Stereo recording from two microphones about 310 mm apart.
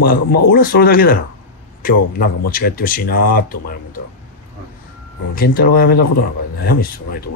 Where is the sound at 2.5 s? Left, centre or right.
Left.